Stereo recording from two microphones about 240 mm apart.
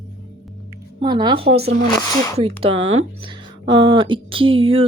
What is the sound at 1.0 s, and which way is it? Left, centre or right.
Speech, centre.